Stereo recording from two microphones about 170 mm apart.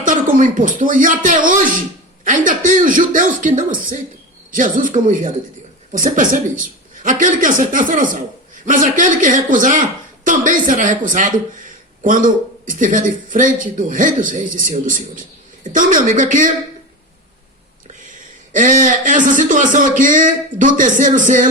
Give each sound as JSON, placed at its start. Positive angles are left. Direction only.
{"t": 0.0, "sound": "speech", "side_deg": -50}
{"t": 18.5, "sound": "speech", "side_deg": -50}